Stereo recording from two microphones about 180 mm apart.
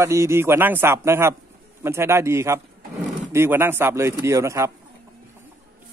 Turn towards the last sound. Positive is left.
turn(degrees=-15)  # may be behind; listen again after turning